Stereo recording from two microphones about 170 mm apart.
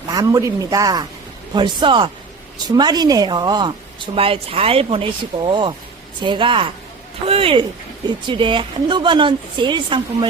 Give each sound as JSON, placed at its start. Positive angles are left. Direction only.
{"t": 0.1, "sound": "a woman's voice", "side_deg": -20}